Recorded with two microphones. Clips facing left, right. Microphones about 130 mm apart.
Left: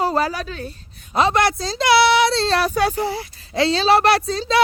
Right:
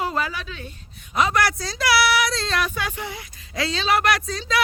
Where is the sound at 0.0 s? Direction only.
35° left (ahead or behind).